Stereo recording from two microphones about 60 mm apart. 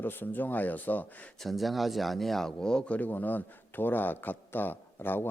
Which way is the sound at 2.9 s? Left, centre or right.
Left.